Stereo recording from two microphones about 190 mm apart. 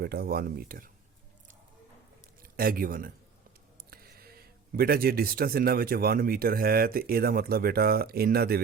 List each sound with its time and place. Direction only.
0.0 s speech: 55° right (ahead or behind)
2.4 s a man's voice: 50° right (ahead or behind)